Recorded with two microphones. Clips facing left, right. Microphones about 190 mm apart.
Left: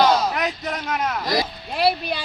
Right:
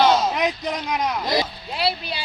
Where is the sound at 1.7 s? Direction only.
50° left (ahead or behind).